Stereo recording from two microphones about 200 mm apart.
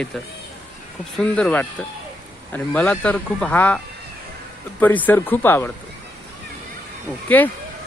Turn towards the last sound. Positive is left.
turn(degrees=10)  # may be behind; listen again after turning